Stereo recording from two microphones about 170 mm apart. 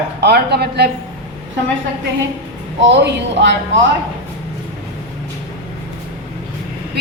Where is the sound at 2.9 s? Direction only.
90° right.